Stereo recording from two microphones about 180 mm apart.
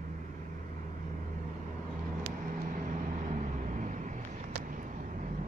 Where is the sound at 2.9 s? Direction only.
45° right (ahead or behind).